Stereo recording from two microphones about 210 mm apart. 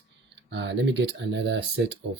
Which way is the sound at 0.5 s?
55° right (ahead or behind).